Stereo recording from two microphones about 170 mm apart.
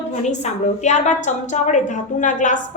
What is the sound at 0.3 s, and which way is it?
A woman's voice, 45° left (ahead or behind).